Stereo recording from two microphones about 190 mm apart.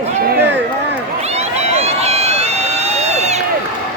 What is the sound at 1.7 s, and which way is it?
Run, 35° right (ahead or behind).